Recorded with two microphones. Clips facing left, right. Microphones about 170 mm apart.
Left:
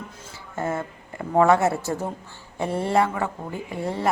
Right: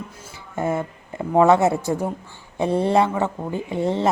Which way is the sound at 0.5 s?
15° right (ahead or behind).